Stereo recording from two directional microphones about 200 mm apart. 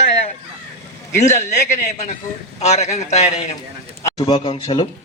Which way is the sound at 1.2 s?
35° left (ahead or behind).